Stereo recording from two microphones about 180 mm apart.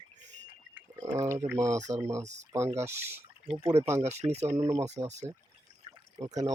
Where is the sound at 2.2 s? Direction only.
40° right (ahead or behind).